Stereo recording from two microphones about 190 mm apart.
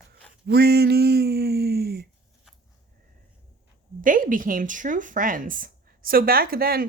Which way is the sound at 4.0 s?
45° right (ahead or behind).